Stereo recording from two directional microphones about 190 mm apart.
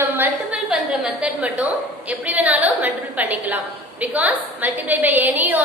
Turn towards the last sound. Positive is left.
turn(degrees=-10)  # may be behind; listen again after turning